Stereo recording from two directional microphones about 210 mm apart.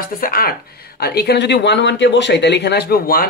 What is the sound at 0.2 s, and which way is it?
Speech, 45° left (ahead or behind).